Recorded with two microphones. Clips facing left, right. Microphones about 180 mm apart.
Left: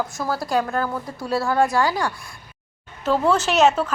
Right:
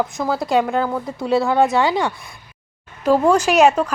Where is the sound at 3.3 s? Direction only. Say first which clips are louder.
Right 2 dB; 15° right (ahead or behind).